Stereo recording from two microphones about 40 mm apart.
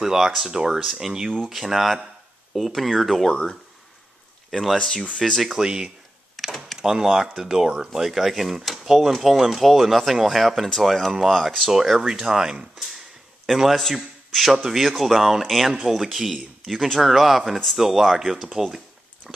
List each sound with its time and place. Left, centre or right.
0.0 s speech: centre
1.5 s speech: centre
3.3 s speech: centre
4.5 s speech: centre
5.5 s speech: centre
6.3 s a sound: centre
6.8 s speech: centre
11.7 s speech: centre
12.7 s a sound: centre
13.5 s a man's voice: centre